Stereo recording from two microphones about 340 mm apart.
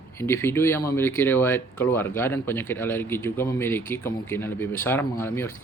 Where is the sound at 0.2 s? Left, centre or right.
Centre.